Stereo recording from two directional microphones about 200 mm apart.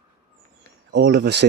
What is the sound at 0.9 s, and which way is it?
Speech, 55° right (ahead or behind).